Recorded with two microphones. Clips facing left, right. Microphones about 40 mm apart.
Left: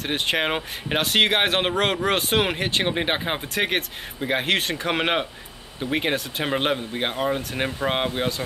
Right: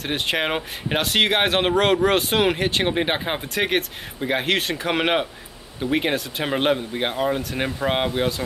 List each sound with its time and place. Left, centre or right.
0.0 s speech: centre